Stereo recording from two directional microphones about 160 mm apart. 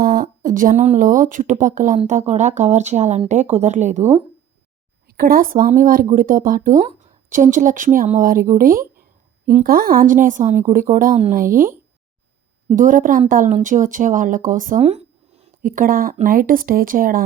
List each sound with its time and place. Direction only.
0.0 s speech: 65° right (ahead or behind); by 4.0 s 45° right (ahead or behind)
5.0 s a woman's voice: 65° right (ahead or behind)
14.8 s a sound: 40° right (ahead or behind)
15.6 s a woman's voice: 60° right (ahead or behind)